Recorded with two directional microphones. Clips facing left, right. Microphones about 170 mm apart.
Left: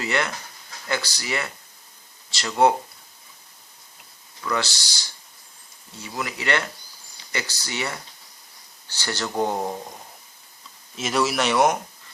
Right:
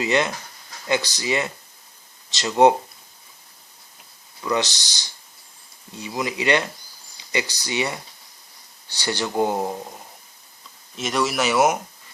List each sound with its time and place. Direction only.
0.0 s speech: 20° right (ahead or behind)
4.4 s speech: 20° right (ahead or behind)
10.9 s speech: centre (ahead or behind)